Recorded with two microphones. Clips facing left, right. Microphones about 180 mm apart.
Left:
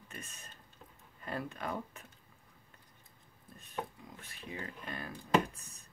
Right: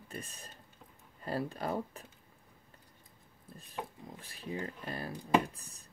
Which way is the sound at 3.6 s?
35° right (ahead or behind).